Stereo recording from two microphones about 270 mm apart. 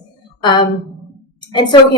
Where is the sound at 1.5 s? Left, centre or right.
Centre.